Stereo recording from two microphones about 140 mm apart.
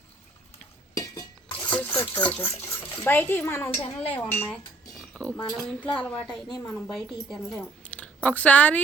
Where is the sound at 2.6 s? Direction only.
15° left (ahead or behind).